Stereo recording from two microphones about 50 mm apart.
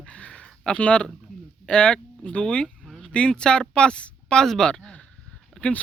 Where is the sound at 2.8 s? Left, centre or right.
Centre.